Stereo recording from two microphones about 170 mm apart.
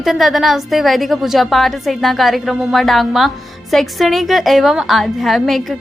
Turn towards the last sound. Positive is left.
turn(degrees=0)  # may be behind; listen again after turning